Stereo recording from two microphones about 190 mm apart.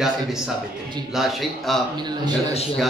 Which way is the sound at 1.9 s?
20° right (ahead or behind).